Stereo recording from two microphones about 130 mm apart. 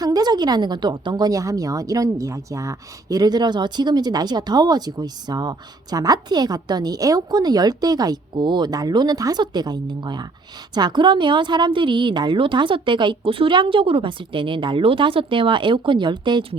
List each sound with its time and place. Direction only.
0.0 s a woman's voice: 30° right (ahead or behind)